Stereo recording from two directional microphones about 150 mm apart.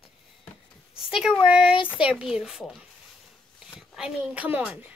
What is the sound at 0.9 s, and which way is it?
A woman's voice, 5° right (ahead or behind).